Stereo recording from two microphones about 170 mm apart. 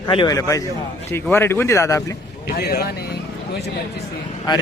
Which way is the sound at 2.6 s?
70° left (ahead or behind).